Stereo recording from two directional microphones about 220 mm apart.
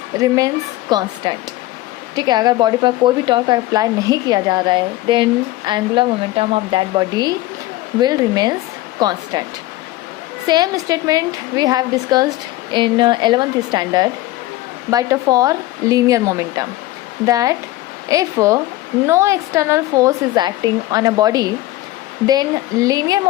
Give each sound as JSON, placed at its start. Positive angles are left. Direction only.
{"t": 0.2, "sound": "a woman's voice", "side_deg": -15}
{"t": 10.4, "sound": "a woman's voice", "side_deg": -15}